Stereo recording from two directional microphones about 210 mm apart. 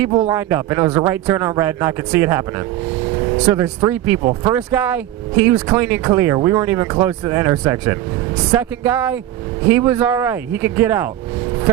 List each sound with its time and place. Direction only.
0.3 s speech: 10° right (ahead or behind)
4.2 s speech: 25° right (ahead or behind)
4.5 s speech: 10° right (ahead or behind)